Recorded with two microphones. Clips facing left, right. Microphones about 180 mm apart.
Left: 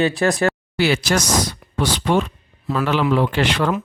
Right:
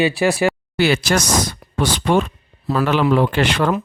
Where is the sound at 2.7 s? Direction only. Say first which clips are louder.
Right 3 dB; 35° right (ahead or behind).